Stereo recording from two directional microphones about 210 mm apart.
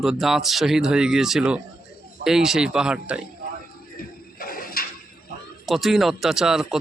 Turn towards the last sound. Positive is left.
turn(degrees=0)  # may be behind; listen again after turning